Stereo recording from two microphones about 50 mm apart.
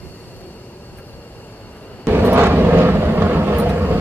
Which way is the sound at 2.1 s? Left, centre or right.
Right.